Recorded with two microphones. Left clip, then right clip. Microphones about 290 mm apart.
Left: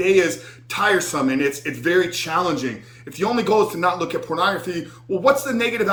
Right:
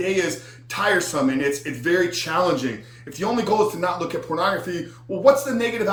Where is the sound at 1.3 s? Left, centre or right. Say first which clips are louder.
Left 2 dB; centre.